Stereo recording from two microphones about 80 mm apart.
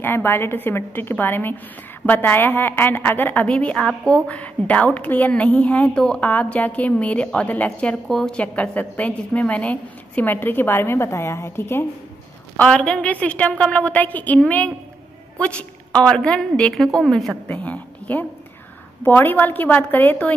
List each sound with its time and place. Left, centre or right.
0.0 s a woman's voice: left
8.1 s a woman's voice: centre
8.4 s a woman's voice: centre
12.6 s a woman's voice: centre
17.5 s a woman's voice: centre